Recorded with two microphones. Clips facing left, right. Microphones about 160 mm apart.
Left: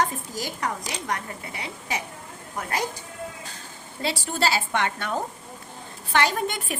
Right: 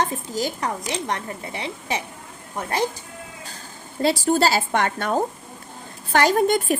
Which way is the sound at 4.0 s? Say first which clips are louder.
Right 8 dB; 40° right (ahead or behind).